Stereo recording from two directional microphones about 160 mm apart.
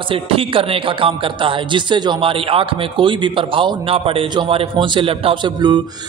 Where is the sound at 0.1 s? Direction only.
35° right (ahead or behind).